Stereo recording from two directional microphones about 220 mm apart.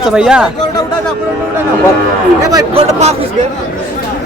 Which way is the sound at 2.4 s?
15° right (ahead or behind).